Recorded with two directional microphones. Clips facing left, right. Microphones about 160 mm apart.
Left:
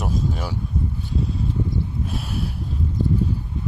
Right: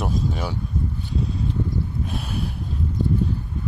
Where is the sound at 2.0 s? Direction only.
Centre (ahead or behind).